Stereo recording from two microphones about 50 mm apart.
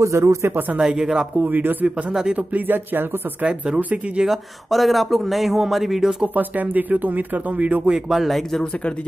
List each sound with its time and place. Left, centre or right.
0.0 s speech: right
0.8 s speech: centre
1.4 s speech: right
3.4 s speech: right
4.3 s speech: centre
6.2 s speech: right
8.1 s speech: centre